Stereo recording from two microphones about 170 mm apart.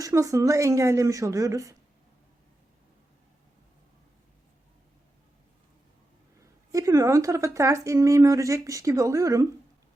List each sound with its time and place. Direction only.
0.0 s speech: 20° right (ahead or behind)
6.4 s speech: 20° right (ahead or behind)